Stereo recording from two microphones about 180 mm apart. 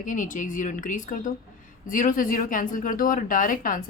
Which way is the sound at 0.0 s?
45° left (ahead or behind).